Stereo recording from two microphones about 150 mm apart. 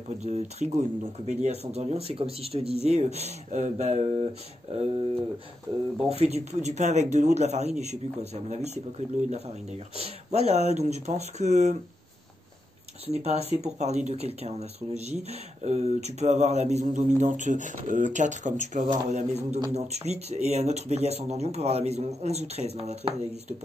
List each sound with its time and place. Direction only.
0.2 s a man's voice: 45° right (ahead or behind)
13.0 s a man's voice: 45° right (ahead or behind)